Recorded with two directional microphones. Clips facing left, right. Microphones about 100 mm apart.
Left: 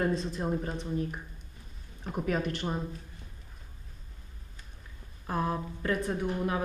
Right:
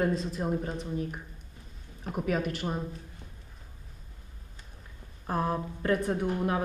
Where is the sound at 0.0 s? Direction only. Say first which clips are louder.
Right 1 dB; 5° right (ahead or behind).